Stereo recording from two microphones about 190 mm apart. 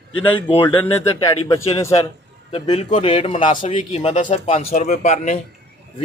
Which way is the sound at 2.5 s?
30° left (ahead or behind).